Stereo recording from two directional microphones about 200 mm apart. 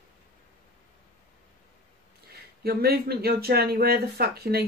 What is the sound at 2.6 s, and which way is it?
Speech, 50° right (ahead or behind).